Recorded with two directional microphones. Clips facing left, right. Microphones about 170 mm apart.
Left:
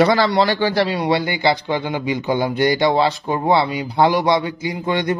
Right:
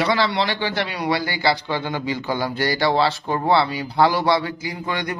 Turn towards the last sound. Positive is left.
turn(degrees=25)  # may be behind; listen again after turning